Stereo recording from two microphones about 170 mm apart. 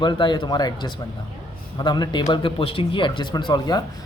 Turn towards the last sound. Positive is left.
turn(degrees=25)  # may be behind; listen again after turning